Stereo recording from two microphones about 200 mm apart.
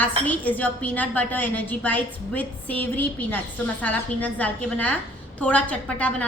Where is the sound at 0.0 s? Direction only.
10° left (ahead or behind).